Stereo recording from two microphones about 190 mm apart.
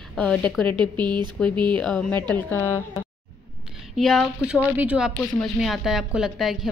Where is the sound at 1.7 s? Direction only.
5° left (ahead or behind).